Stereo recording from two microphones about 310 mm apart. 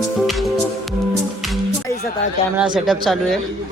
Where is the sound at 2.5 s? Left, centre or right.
Centre.